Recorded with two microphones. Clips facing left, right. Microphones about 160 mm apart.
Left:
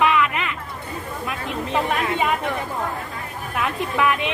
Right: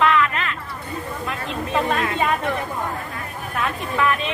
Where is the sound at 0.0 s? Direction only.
15° left (ahead or behind).